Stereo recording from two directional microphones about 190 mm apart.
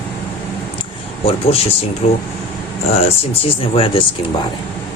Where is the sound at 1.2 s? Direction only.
30° left (ahead or behind).